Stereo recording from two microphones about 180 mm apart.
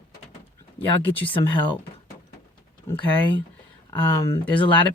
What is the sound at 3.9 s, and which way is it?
Speech, 15° left (ahead or behind).